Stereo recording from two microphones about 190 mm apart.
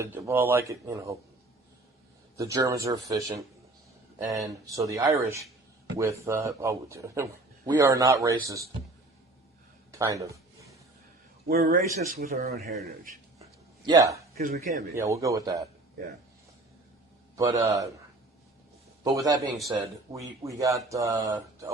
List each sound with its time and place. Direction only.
0.0 s a man's voice: 15° right (ahead or behind)
2.3 s a man's voice: 15° right (ahead or behind)
9.9 s a sound: 15° right (ahead or behind)
11.7 s speech: 40° right (ahead or behind)
13.8 s a man's voice: 15° right (ahead or behind)
14.4 s speech: 50° right (ahead or behind)
14.9 s a man's voice: 15° right (ahead or behind)
17.3 s a man's voice: 20° right (ahead or behind)
19.0 s a man's voice: 20° right (ahead or behind)